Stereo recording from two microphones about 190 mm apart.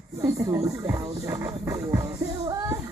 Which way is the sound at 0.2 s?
15° right (ahead or behind).